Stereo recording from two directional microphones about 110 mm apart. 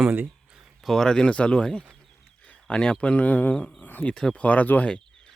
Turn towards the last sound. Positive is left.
turn(degrees=10)  # may be behind; listen again after turning